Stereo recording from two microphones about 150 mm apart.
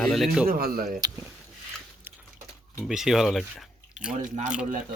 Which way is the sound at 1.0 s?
20° right (ahead or behind).